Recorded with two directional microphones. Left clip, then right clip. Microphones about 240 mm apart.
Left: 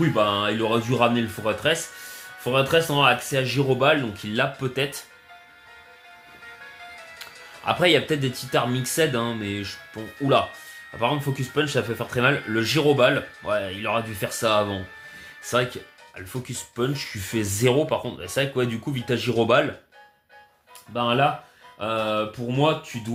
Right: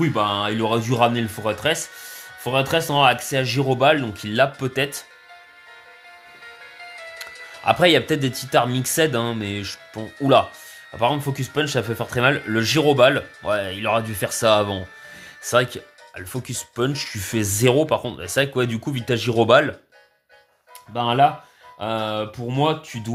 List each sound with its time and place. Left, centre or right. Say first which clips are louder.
0.0 s speech: even; right
6.4 s music: right 1 dB; right
7.6 s speech: right 4 dB; right
20.9 s speech: right 4 dB; right